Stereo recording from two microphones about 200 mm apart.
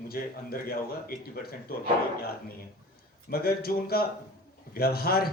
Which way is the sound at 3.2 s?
50° left (ahead or behind).